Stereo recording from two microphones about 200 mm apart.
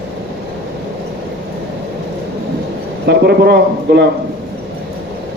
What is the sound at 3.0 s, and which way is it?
A man's voice, 55° right (ahead or behind).